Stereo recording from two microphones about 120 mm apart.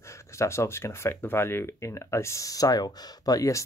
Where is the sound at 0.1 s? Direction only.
25° left (ahead or behind).